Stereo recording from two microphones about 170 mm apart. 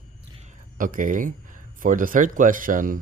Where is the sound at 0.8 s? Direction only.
50° right (ahead or behind).